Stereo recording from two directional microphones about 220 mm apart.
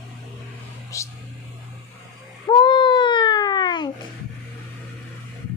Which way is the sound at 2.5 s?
20° left (ahead or behind).